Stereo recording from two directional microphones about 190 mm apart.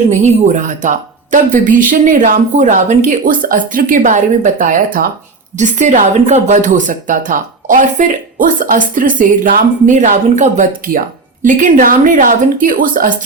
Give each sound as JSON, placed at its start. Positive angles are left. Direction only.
{"t": 0.1, "sound": "speech", "side_deg": -40}